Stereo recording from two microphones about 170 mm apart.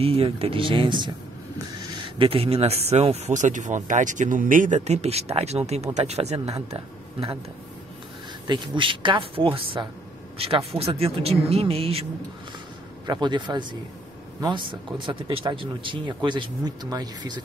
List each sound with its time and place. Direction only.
0.0 s speech: 35° right (ahead or behind)
2.1 s speech: 30° right (ahead or behind)
8.5 s speech: 30° right (ahead or behind)
13.0 s speech: 25° right (ahead or behind)